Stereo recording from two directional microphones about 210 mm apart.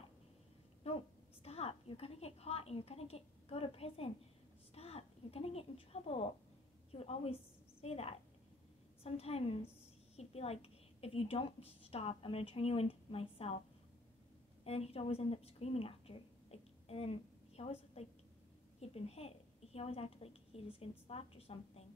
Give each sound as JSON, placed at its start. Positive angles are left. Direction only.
{"t": 0.8, "sound": "a sound", "side_deg": 30}
{"t": 1.4, "sound": "a woman's voice", "side_deg": 30}
{"t": 14.6, "sound": "a woman's voice", "side_deg": 30}